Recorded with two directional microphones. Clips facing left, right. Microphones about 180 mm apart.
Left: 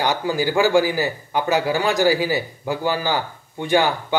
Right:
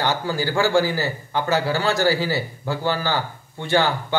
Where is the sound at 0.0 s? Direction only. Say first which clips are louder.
Left 2 dB; 15° left (ahead or behind).